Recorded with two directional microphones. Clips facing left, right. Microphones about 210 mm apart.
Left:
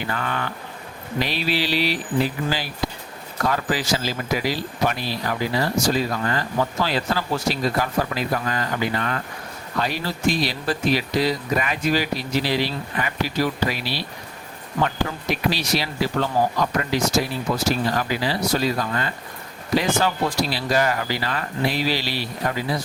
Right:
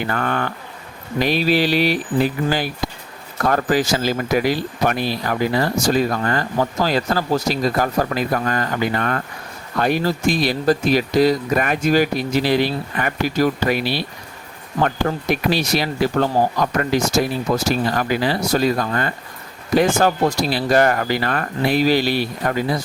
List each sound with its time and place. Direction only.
0.1 s speech: 50° right (ahead or behind)
3.4 s speech: 50° right (ahead or behind)